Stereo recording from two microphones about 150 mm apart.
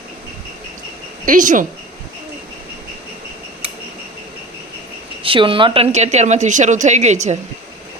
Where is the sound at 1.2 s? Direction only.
60° right (ahead or behind).